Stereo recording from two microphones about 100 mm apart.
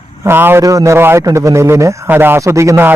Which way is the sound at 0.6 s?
35° right (ahead or behind).